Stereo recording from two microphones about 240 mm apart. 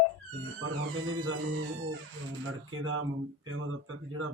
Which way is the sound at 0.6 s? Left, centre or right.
Right.